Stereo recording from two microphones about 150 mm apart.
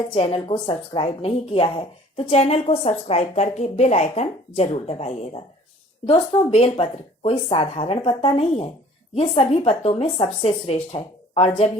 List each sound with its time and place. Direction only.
0.1 s a woman's voice: 40° left (ahead or behind)